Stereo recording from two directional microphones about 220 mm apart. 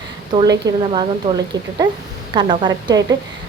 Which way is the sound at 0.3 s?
20° right (ahead or behind).